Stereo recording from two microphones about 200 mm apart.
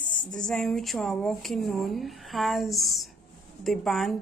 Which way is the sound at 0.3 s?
5° left (ahead or behind).